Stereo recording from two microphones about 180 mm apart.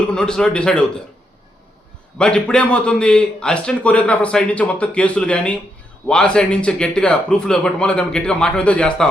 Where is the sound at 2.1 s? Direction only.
5° left (ahead or behind).